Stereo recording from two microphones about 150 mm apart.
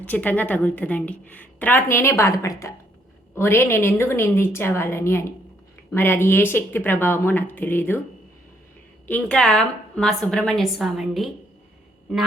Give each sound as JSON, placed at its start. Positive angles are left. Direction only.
{"t": 0.0, "sound": "a woman's voice", "side_deg": 10}
{"t": 9.0, "sound": "a woman's voice", "side_deg": 10}